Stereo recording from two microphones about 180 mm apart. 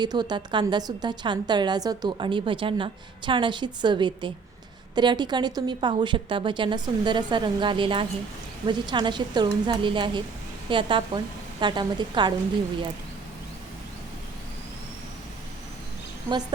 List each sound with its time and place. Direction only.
0.0 s a woman's voice: 25° right (ahead or behind)